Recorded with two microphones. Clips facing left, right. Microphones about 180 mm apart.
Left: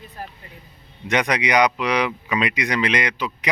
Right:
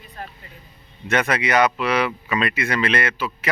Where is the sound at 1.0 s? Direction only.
15° left (ahead or behind).